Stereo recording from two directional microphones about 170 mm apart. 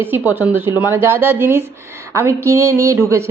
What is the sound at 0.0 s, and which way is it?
A woman's voice, 10° right (ahead or behind).